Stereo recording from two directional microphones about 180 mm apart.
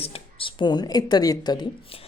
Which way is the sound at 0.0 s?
30° left (ahead or behind).